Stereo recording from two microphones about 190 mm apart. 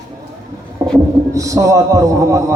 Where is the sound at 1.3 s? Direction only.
15° right (ahead or behind).